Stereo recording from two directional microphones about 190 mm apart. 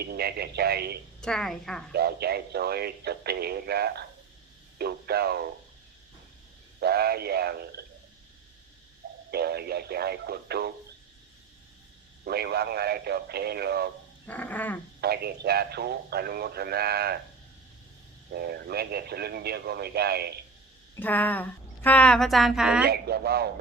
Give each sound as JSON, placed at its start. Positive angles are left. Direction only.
{"t": 0.0, "sound": "a man's voice", "side_deg": -55}
{"t": 1.2, "sound": "a woman's voice", "side_deg": 5}
{"t": 1.9, "sound": "a man's voice", "side_deg": -55}
{"t": 6.7, "sound": "a man's voice", "side_deg": -55}
{"t": 9.3, "sound": "a man's voice", "side_deg": -55}
{"t": 12.2, "sound": "a man's voice", "side_deg": -55}
{"t": 14.3, "sound": "dog", "side_deg": 10}
{"t": 15.0, "sound": "a man's voice", "side_deg": -55}
{"t": 18.3, "sound": "a man's voice", "side_deg": -55}
{"t": 20.9, "sound": "a woman's voice", "side_deg": 10}
{"t": 22.9, "sound": "a man's voice", "side_deg": -55}